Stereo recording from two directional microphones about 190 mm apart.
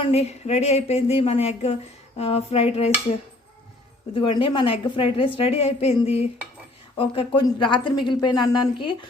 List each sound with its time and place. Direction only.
0.0 s speech: 35° left (ahead or behind)
4.1 s a woman's voice: 25° left (ahead or behind)